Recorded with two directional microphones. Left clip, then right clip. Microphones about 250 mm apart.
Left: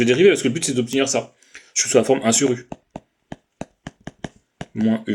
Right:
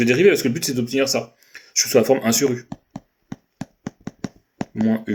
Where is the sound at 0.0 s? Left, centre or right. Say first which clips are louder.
Left 1 dB; left.